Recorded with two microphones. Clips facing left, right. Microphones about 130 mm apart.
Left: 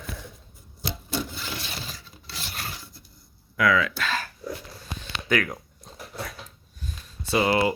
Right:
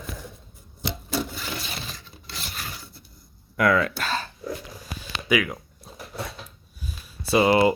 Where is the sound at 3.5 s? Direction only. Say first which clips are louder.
Right 2 dB; 50° right (ahead or behind).